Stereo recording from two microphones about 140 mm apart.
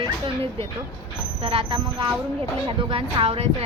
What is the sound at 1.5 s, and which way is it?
A child's voice, 40° right (ahead or behind).